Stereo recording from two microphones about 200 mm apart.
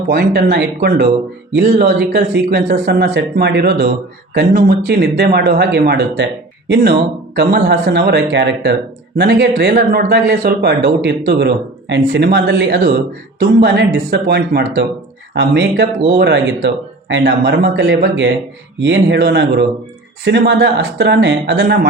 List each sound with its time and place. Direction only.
0.1 s speech: 50° right (ahead or behind)
7.3 s speech: 55° right (ahead or behind)
9.1 s speech: 50° right (ahead or behind)